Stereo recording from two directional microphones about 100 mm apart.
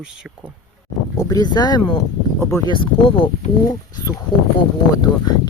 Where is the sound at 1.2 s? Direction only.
40° left (ahead or behind); by 3.2 s 60° left (ahead or behind).